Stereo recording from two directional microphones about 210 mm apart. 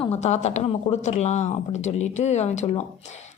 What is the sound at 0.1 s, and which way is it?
Speech, 35° left (ahead or behind).